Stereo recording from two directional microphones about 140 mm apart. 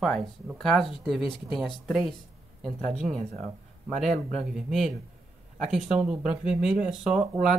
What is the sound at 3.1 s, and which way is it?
Speech, 55° right (ahead or behind).